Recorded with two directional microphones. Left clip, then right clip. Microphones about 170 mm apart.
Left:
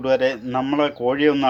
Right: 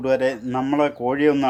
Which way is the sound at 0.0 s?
20° right (ahead or behind).